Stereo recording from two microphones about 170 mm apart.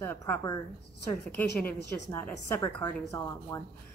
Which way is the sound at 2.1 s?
15° left (ahead or behind).